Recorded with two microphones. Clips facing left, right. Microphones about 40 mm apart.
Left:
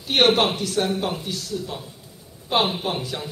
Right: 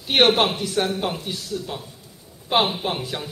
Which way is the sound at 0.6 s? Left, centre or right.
Centre.